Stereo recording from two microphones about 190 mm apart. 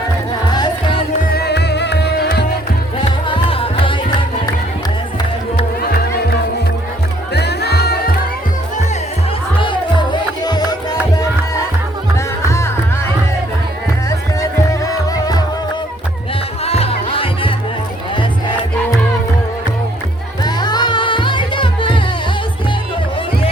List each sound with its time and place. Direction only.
1.3 s music: 55° left (ahead or behind)
3.2 s music: 30° left (ahead or behind)
7.3 s music: 60° left (ahead or behind)
9.6 s music: 25° left (ahead or behind)
12.1 s music: 15° left (ahead or behind)
14.7 s music: 20° left (ahead or behind)
16.6 s music: 30° left (ahead or behind)
20.4 s music: 20° left (ahead or behind)